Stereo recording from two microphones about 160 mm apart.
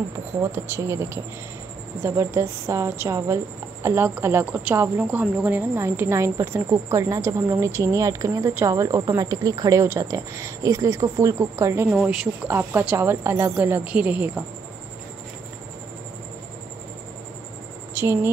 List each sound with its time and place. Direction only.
0.4 s a woman's voice: 15° right (ahead or behind)
17.9 s speech: 15° right (ahead or behind)